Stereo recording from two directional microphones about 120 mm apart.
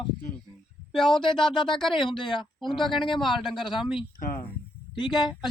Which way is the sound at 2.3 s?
40° left (ahead or behind).